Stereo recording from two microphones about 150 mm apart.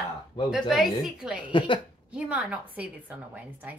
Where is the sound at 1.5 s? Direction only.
35° left (ahead or behind).